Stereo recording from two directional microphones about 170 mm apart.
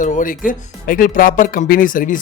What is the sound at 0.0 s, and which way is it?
A man's voice, 50° left (ahead or behind).